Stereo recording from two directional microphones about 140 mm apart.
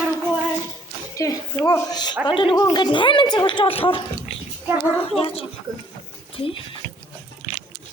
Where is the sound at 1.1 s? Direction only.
25° left (ahead or behind); by 4.0 s 40° left (ahead or behind).